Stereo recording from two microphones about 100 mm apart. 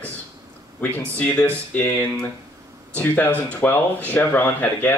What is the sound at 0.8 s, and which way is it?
Speech, 15° left (ahead or behind).